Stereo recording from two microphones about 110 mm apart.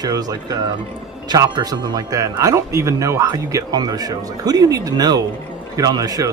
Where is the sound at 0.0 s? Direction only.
35° right (ahead or behind).